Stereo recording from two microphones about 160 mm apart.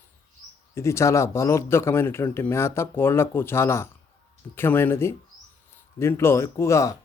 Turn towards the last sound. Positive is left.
turn(degrees=20)  # may be behind; listen again after turning